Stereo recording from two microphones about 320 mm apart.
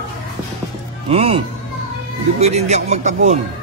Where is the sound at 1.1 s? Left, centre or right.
Centre.